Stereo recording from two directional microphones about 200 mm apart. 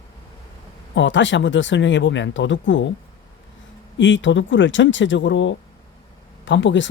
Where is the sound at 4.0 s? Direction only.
65° left (ahead or behind).